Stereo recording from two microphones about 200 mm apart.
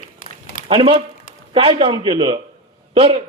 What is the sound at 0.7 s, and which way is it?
A man's voice, 25° right (ahead or behind).